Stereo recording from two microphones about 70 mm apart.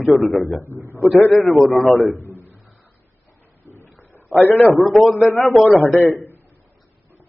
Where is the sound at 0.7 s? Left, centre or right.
Right.